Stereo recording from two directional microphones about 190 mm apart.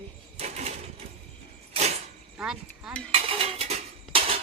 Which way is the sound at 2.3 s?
5° right (ahead or behind).